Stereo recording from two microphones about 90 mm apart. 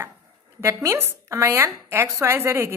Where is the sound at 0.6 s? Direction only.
35° right (ahead or behind).